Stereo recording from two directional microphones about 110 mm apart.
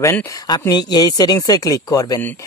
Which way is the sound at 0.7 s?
40° left (ahead or behind).